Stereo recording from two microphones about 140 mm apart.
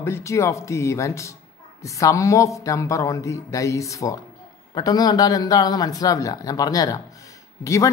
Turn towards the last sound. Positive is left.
turn(degrees=25)  # may be behind; listen again after turning